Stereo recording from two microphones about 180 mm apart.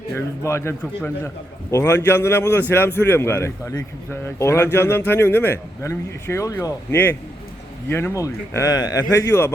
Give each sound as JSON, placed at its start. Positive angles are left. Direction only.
{"t": 0.1, "sound": "speech", "side_deg": 15}